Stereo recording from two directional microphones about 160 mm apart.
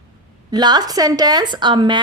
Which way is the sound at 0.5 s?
25° right (ahead or behind).